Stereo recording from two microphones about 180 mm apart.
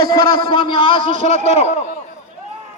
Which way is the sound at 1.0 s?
45° right (ahead or behind).